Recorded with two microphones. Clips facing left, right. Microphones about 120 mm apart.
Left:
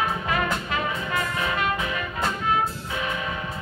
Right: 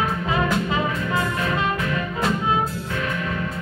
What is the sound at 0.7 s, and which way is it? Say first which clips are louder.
Music: right 4 dB; 25° right (ahead or behind).